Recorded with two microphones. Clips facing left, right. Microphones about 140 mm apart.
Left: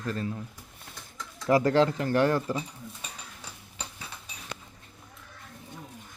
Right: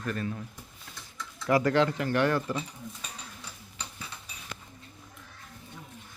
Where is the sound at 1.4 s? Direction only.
30° left (ahead or behind).